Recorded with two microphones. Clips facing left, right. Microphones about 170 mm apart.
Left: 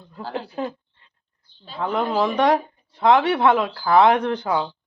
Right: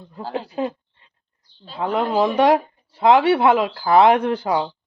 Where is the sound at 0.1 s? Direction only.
15° right (ahead or behind).